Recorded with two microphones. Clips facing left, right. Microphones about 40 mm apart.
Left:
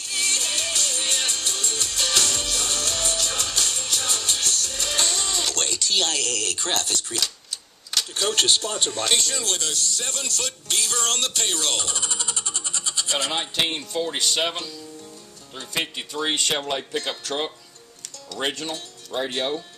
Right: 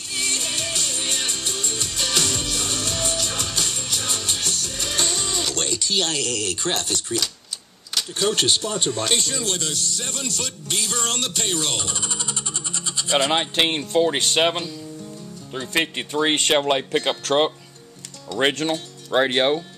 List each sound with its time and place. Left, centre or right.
0.1 s music: centre
7.9 s speech: centre
13.3 s speech: right
15.8 s speech: right
16.3 s speech: right
16.9 s speech: right
18.3 s speech: centre
19.1 s speech: right